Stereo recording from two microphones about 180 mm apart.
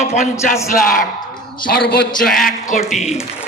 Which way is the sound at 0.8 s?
50° left (ahead or behind).